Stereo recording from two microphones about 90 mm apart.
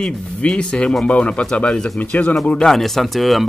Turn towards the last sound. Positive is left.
turn(degrees=0)  # may be behind; listen again after turning